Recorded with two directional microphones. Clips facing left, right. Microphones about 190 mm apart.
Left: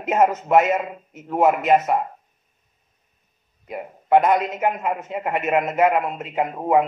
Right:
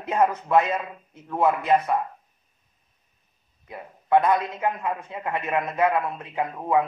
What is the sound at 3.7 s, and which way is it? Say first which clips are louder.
A man's voice: left 3 dB; 25° left (ahead or behind).